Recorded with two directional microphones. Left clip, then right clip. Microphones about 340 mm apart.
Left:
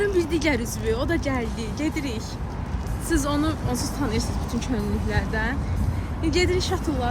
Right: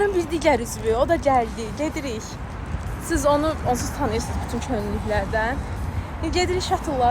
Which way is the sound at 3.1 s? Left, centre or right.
Centre.